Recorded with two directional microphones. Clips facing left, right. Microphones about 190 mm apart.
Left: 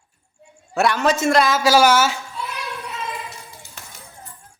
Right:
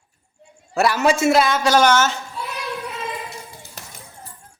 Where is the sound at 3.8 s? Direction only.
40° right (ahead or behind).